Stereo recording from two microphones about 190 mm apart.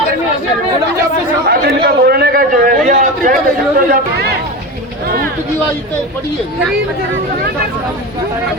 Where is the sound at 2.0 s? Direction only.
55° right (ahead or behind).